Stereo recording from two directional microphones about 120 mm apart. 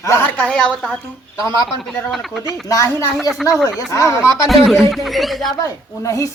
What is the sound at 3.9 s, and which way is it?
Speech, 25° left (ahead or behind).